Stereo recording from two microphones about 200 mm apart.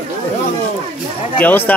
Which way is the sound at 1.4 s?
10° left (ahead or behind).